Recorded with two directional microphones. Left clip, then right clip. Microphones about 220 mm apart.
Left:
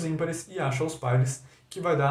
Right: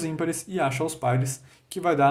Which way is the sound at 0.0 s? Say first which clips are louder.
Right 2 dB; 45° right (ahead or behind).